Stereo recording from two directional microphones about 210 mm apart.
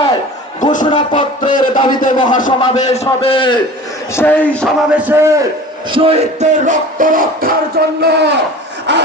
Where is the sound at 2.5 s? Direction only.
30° left (ahead or behind).